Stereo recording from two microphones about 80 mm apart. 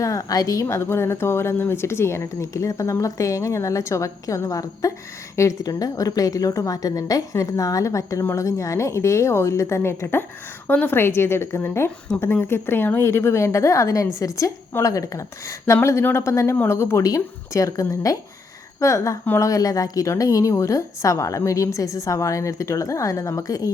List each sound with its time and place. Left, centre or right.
0.0 s a woman's voice: left